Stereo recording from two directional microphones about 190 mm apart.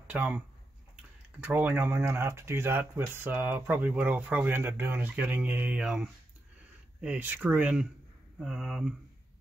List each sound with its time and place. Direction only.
0.0 s speech: 5° right (ahead or behind)
1.4 s speech: 10° right (ahead or behind)